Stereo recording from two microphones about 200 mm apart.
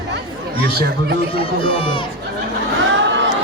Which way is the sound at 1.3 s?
25° left (ahead or behind).